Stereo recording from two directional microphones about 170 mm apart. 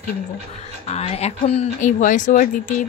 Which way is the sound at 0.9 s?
40° left (ahead or behind).